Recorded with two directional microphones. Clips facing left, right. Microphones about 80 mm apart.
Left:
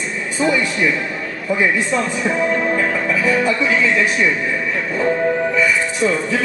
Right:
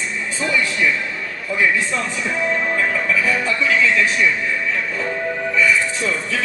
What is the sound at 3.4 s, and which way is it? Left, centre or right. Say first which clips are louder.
Speech: left 2 dB; left.